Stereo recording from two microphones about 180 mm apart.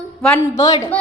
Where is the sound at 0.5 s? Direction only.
20° left (ahead or behind).